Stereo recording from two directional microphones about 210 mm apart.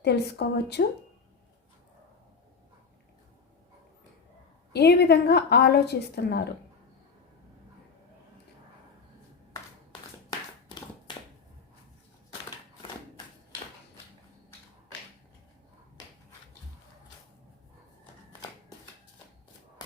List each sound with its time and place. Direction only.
0.0 s a woman's voice: 50° left (ahead or behind)
4.7 s a woman's voice: 50° left (ahead or behind)